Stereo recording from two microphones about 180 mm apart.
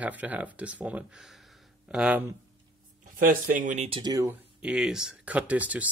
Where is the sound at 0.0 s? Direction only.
10° right (ahead or behind).